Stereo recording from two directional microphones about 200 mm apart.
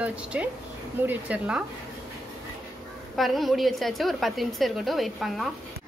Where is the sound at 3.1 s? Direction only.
Centre (ahead or behind).